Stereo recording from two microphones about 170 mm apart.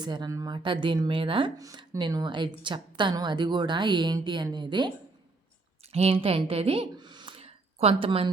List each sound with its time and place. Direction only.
0.0 s speech: 25° right (ahead or behind)
5.9 s a woman's voice: 35° right (ahead or behind)